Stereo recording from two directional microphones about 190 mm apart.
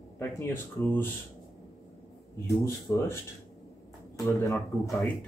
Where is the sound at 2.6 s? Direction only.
15° left (ahead or behind).